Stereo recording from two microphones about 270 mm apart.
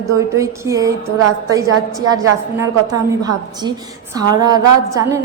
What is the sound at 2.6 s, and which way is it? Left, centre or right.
A woman's voice, centre.